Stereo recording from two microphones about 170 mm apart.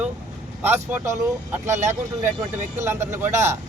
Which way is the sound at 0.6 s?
15° right (ahead or behind).